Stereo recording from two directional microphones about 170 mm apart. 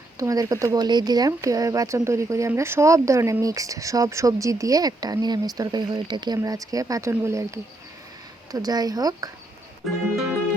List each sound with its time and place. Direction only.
0.2 s speech: 20° right (ahead or behind)